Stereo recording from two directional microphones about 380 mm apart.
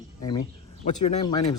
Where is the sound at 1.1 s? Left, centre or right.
Centre.